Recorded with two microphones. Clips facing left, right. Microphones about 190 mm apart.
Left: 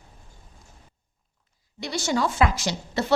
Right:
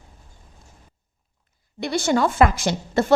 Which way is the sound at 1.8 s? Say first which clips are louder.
Right 5 dB; 55° right (ahead or behind).